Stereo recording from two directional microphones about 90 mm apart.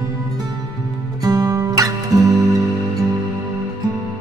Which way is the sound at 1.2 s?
45° right (ahead or behind).